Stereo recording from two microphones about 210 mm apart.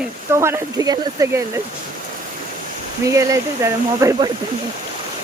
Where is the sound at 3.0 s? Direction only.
15° right (ahead or behind).